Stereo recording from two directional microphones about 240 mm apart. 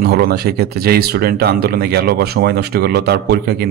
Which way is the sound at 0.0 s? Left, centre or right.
Right.